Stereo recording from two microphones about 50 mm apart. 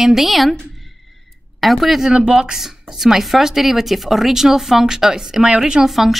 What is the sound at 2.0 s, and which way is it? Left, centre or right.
A woman's voice, centre.